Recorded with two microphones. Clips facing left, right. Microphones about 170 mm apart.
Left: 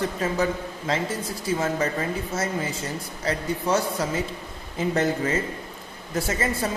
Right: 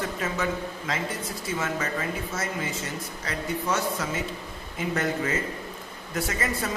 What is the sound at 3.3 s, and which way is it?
Speech, 30° left (ahead or behind).